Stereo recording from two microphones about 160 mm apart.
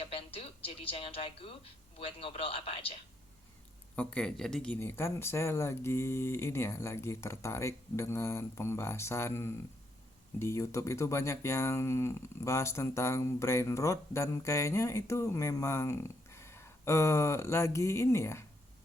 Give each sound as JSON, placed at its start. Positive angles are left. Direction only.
{"t": 0.0, "sound": "speech", "side_deg": 35}
{"t": 3.9, "sound": "speech", "side_deg": 5}